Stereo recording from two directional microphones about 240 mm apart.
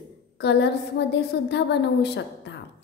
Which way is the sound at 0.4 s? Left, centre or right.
Left.